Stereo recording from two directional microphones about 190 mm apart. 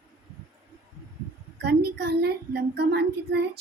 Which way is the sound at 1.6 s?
55° right (ahead or behind).